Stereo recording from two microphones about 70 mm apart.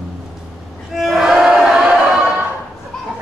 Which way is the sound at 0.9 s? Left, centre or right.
Centre.